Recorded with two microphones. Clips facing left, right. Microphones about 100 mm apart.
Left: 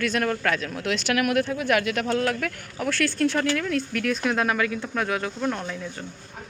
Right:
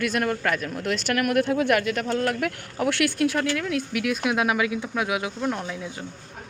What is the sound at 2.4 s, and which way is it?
Speech, 15° right (ahead or behind).